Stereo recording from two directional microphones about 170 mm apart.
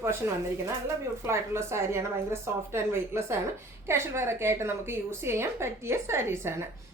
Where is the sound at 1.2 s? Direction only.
15° right (ahead or behind).